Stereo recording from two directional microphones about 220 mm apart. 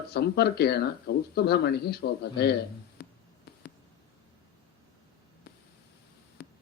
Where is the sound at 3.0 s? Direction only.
45° left (ahead or behind).